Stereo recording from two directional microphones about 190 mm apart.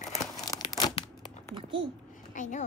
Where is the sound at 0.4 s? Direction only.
20° left (ahead or behind).